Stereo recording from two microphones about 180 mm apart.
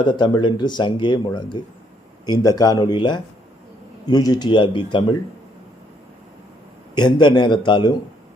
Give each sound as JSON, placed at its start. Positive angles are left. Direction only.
{"t": 0.0, "sound": "speech", "side_deg": 25}
{"t": 6.9, "sound": "speech", "side_deg": 25}